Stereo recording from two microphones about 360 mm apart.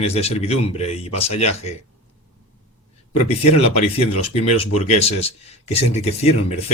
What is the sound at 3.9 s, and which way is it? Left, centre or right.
Speech, centre.